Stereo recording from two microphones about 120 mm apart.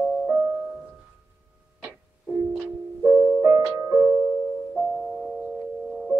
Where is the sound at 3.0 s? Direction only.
10° right (ahead or behind).